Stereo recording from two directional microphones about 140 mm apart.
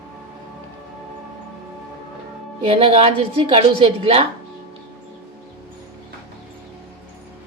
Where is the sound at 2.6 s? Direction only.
45° right (ahead or behind).